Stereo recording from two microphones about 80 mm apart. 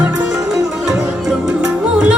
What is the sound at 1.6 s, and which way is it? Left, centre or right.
Music, centre.